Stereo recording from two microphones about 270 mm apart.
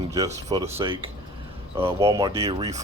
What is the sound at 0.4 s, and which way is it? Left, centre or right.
Speech, centre.